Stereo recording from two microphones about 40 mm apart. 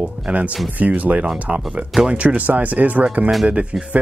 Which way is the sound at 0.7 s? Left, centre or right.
Right.